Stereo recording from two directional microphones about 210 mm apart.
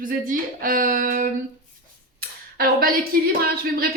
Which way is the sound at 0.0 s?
40° right (ahead or behind).